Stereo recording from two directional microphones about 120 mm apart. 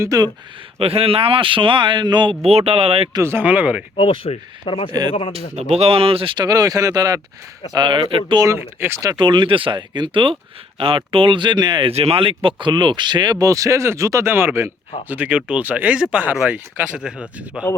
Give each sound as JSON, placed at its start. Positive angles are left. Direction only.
{"t": 0.0, "sound": "speech", "side_deg": -30}
{"t": 0.8, "sound": "speech", "side_deg": -50}
{"t": 2.4, "sound": "speech", "side_deg": -55}
{"t": 3.2, "sound": "speech", "side_deg": -15}
{"t": 3.9, "sound": "speech", "side_deg": 45}
{"t": 5.3, "sound": "speech", "side_deg": -65}
{"t": 8.4, "sound": "speech", "side_deg": -20}
{"t": 9.2, "sound": "speech", "side_deg": -40}
{"t": 11.9, "sound": "speech", "side_deg": -55}